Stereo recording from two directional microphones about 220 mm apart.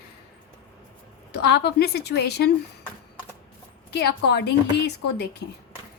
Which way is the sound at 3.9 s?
50° left (ahead or behind).